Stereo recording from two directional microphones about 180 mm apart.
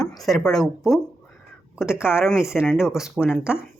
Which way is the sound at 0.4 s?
Centre (ahead or behind).